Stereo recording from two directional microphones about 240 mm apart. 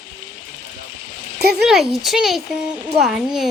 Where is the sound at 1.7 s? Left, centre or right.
Centre.